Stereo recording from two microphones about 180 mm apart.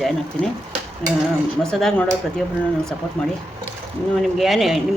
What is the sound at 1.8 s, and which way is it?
Speech, 5° left (ahead or behind).